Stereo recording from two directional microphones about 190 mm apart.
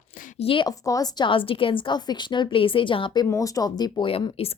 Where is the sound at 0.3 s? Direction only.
30° left (ahead or behind).